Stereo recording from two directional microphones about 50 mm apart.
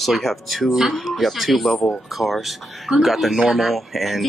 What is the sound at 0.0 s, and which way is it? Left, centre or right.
Speech, centre.